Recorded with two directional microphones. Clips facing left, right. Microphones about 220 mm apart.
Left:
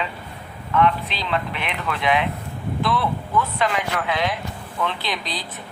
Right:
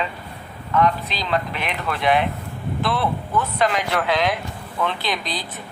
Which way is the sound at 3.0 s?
40° right (ahead or behind).